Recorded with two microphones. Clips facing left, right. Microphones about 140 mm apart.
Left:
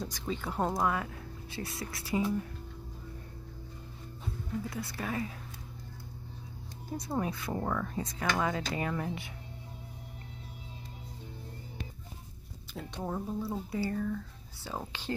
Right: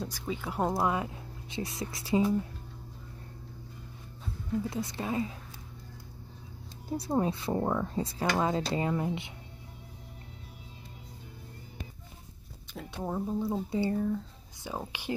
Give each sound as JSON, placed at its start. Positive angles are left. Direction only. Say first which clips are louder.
{"t": 0.0, "sound": "speech", "louder": "right 1 dB", "side_deg": -10}
{"t": 0.8, "sound": "speech", "louder": "right 2 dB", "side_deg": -20}
{"t": 4.6, "sound": "speech", "louder": "right 3 dB", "side_deg": -25}
{"t": 7.1, "sound": "speech", "louder": "right 5 dB", "side_deg": -25}
{"t": 12.7, "sound": "speech", "louder": "right 2 dB", "side_deg": -5}